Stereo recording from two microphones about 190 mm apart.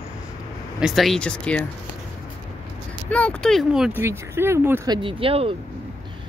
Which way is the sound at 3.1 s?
5° left (ahead or behind).